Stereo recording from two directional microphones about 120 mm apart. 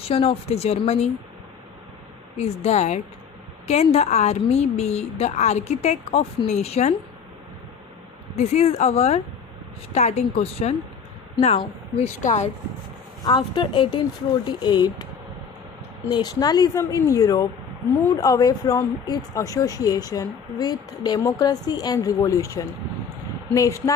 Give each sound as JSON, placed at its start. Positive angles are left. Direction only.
{"t": 0.0, "sound": "a woman's voice", "side_deg": 55}
{"t": 2.3, "sound": "a woman's voice", "side_deg": 65}
{"t": 8.4, "sound": "a woman's voice", "side_deg": 70}
{"t": 13.2, "sound": "a woman's voice", "side_deg": 40}
{"t": 16.1, "sound": "a woman's voice", "side_deg": 35}